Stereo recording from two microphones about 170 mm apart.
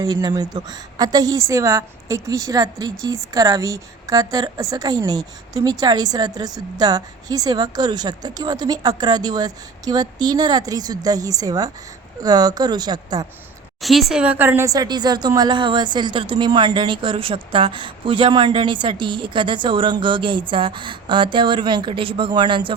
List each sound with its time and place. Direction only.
0.0 s a woman's voice: 25° right (ahead or behind)
13.8 s a woman's voice: centre (ahead or behind); by 22.7 s 30° right (ahead or behind)